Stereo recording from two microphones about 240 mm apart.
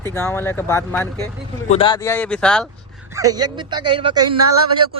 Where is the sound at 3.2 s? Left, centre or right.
Centre.